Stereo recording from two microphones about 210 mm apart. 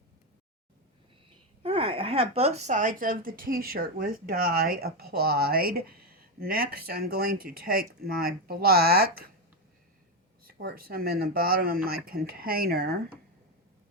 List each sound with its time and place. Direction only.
1.6 s speech: 25° right (ahead or behind); by 9.3 s 45° right (ahead or behind)
10.4 s speech: 45° right (ahead or behind)